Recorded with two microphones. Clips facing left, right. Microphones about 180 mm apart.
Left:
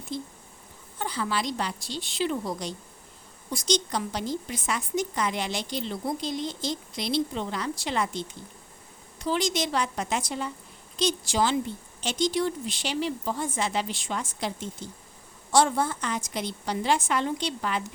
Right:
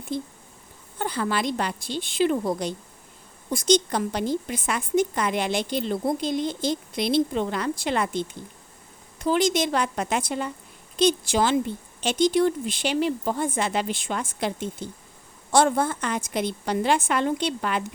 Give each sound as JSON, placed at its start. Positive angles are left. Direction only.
{"t": 0.1, "sound": "a woman's voice", "side_deg": -55}